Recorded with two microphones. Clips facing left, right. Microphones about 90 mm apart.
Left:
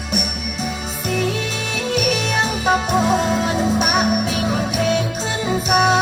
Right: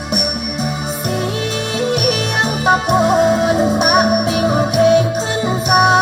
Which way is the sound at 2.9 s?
20° right (ahead or behind).